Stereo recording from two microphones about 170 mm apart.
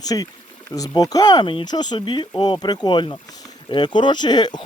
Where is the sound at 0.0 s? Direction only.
20° left (ahead or behind).